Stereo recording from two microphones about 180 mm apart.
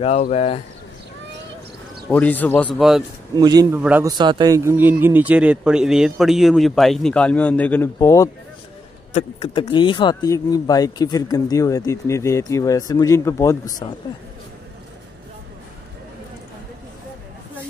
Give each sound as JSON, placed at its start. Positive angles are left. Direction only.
{"t": 0.0, "sound": "speech", "side_deg": 35}
{"t": 2.0, "sound": "a man's voice", "side_deg": 10}
{"t": 3.3, "sound": "a man's voice", "side_deg": -20}
{"t": 3.8, "sound": "speech", "side_deg": -10}
{"t": 4.2, "sound": "speech", "side_deg": -25}
{"t": 9.1, "sound": "speech", "side_deg": 30}